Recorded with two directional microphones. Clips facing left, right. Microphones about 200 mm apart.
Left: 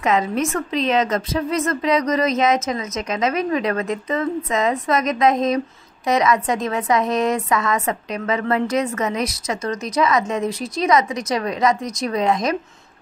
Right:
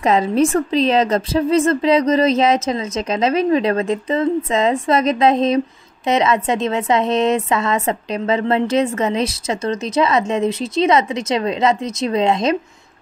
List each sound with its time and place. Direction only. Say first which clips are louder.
0.0 s a woman's voice: right 5 dB; 30° right (ahead or behind)